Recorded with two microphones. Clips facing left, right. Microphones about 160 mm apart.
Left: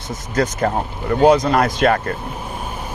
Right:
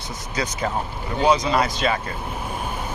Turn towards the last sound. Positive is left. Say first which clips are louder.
# left 7 dB
turn(degrees=55)  # may be behind; listen again after turning